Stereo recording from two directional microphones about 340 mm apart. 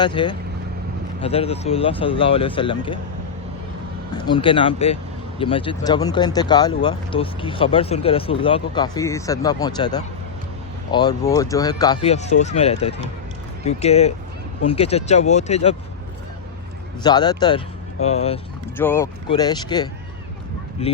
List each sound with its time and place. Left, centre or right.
0.0 s speech: centre
4.1 s speech: centre
17.0 s speech: centre
18.8 s speech: centre